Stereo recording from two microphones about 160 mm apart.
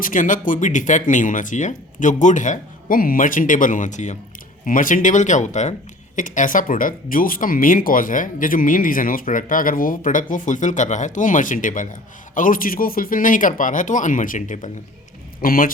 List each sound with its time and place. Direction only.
0.0 s speech: 55° left (ahead or behind)